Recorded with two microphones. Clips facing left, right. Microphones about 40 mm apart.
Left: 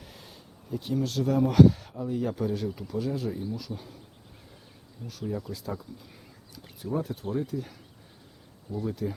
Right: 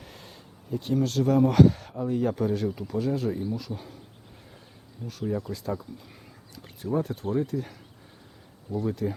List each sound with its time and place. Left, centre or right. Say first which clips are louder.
0.0 s speech: right 2 dB; centre
5.0 s speech: right 3 dB; right
5.4 s speech: right 4 dB; centre
6.8 s speech: right 3 dB; centre
9.0 s speech: right 3 dB; centre